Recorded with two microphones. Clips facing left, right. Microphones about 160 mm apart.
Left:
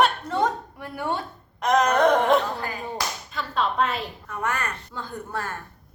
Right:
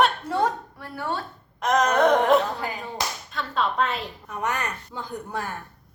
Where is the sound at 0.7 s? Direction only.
15° left (ahead or behind).